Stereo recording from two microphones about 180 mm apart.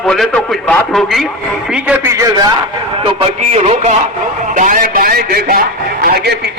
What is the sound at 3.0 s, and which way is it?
Speech, 35° right (ahead or behind).